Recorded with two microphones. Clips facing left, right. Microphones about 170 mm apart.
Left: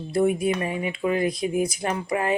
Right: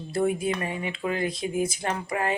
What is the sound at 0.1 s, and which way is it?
Speech, 30° right (ahead or behind).